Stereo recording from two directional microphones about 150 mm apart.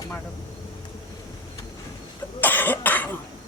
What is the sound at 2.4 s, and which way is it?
Cough, 10° left (ahead or behind).